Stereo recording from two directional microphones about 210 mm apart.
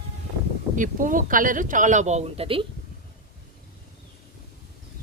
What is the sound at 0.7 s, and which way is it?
Speech, 40° right (ahead or behind).